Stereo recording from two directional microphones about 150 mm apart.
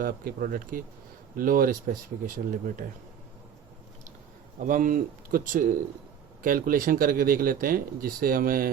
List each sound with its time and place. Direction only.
0.0 s speech: 75° right (ahead or behind)
4.6 s speech: 60° right (ahead or behind)